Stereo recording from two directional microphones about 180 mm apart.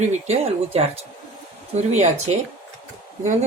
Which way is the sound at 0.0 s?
35° right (ahead or behind).